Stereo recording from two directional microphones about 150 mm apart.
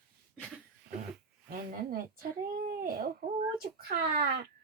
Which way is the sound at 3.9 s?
90° right.